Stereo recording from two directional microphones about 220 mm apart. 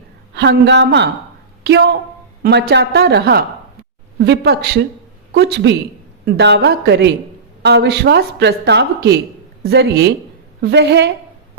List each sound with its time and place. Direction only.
0.3 s a woman's voice: 50° right (ahead or behind)